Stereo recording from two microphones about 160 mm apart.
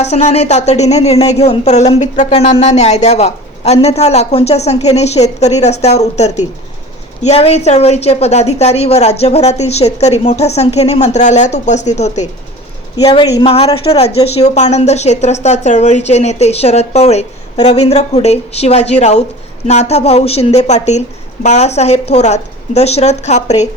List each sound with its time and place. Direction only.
0.0 s a woman's voice: 45° left (ahead or behind)
13.0 s a woman's voice: 25° left (ahead or behind); by 23.6 s 45° left (ahead or behind)